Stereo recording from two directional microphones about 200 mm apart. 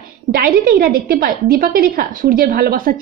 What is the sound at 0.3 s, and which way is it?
A woman's voice, 45° right (ahead or behind).